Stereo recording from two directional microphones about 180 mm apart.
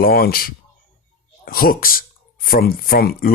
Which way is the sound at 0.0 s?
55° left (ahead or behind).